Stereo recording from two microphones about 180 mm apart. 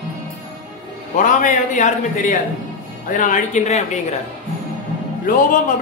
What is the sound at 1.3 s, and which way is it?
Speech, 45° left (ahead or behind).